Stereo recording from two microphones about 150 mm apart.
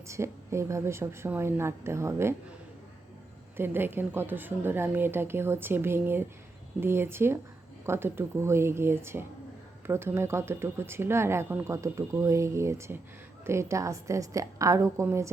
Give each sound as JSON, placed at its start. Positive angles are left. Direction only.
{"t": 0.1, "sound": "speech", "side_deg": -20}
{"t": 3.6, "sound": "a woman's voice", "side_deg": -15}